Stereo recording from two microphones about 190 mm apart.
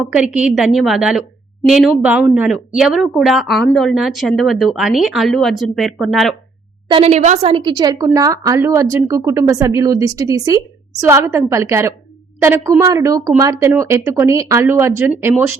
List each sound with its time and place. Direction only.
0.0 s speech: 5° right (ahead or behind)
6.8 s a woman's voice: 30° right (ahead or behind); by 15.5 s 10° right (ahead or behind)